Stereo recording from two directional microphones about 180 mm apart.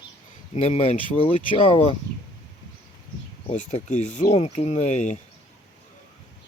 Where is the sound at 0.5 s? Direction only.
35° left (ahead or behind).